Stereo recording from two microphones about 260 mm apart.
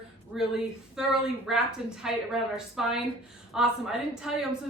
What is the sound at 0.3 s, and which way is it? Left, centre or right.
A woman's voice, centre.